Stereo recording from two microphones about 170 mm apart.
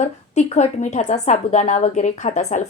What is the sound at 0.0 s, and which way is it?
A woman's voice, 45° left (ahead or behind).